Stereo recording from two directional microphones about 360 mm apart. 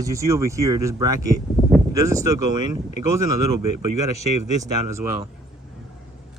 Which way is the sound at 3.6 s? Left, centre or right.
Right.